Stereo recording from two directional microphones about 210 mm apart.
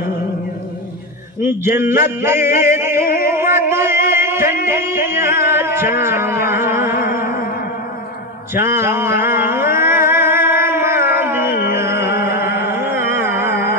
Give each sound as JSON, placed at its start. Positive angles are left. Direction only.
{"t": 1.4, "sound": "speech", "side_deg": -10}
{"t": 2.6, "sound": "music", "side_deg": -10}
{"t": 6.9, "sound": "music", "side_deg": 45}
{"t": 8.5, "sound": "a sound", "side_deg": -10}
{"t": 11.7, "sound": "music", "side_deg": -10}